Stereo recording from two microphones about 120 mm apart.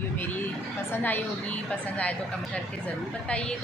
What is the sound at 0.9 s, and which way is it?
Speech, 15° left (ahead or behind).